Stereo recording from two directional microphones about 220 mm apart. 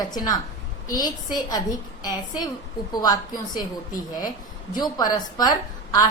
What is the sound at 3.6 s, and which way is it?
Speech, 40° left (ahead or behind).